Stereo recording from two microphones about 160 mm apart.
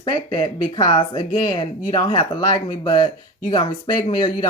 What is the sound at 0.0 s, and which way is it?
Speech, 30° left (ahead or behind).